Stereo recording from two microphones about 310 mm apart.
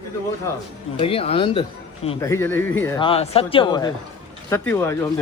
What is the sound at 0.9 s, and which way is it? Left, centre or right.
Speech, centre.